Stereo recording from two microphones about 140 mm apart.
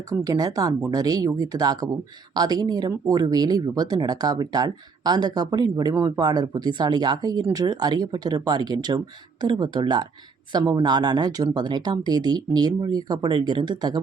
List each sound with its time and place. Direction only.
0.1 s speech: 25° right (ahead or behind)